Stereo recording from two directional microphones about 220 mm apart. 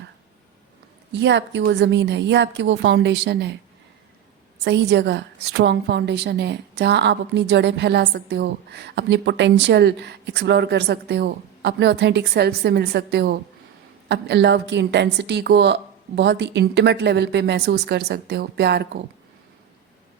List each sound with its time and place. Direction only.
1.1 s a woman's voice: 55° right (ahead or behind)
4.6 s a woman's voice: 50° right (ahead or behind)